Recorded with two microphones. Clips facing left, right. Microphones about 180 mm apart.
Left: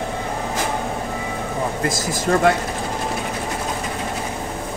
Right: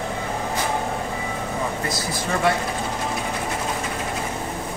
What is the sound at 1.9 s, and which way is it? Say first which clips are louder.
Speech: left 5 dB; 45° left (ahead or behind).